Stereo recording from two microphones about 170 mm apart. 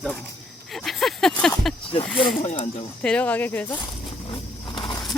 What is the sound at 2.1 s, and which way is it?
Speech, centre (ahead or behind).